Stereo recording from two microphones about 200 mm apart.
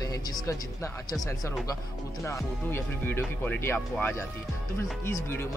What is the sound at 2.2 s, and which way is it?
Speech, 10° left (ahead or behind).